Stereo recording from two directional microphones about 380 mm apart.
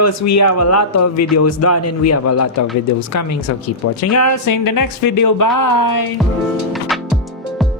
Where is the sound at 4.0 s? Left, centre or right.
Left.